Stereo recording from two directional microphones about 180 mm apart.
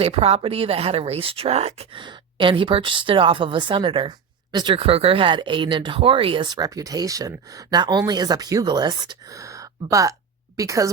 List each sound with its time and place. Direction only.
0.0 s a woman's voice: 35° right (ahead or behind); by 10.9 s 20° right (ahead or behind)